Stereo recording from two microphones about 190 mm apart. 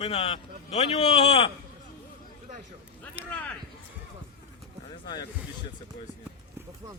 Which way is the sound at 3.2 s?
10° right (ahead or behind).